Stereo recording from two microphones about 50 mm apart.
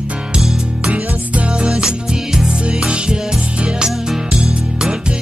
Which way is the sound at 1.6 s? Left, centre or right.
Centre.